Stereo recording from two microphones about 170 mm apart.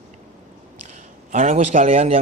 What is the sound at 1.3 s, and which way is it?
Speech, 45° right (ahead or behind).